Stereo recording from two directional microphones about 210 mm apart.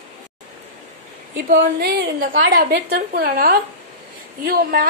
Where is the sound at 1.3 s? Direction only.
50° right (ahead or behind).